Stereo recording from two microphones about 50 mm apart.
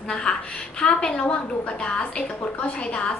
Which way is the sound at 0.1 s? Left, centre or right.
Centre.